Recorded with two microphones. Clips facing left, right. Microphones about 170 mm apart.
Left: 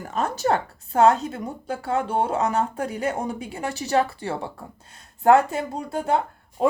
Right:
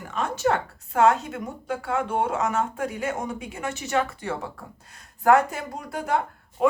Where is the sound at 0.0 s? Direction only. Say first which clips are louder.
Even; 40° left (ahead or behind).